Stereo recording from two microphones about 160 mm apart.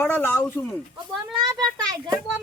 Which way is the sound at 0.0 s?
15° left (ahead or behind).